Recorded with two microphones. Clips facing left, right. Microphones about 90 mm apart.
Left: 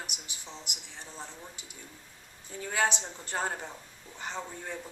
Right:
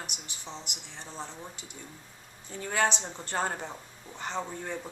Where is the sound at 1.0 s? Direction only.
25° right (ahead or behind).